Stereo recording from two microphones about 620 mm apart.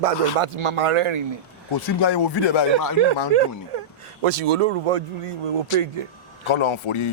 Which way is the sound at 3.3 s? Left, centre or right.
Right.